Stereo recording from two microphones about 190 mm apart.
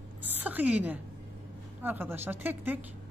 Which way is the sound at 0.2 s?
10° right (ahead or behind).